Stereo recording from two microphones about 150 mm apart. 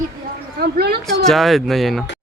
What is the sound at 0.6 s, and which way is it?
Speech, 90° right.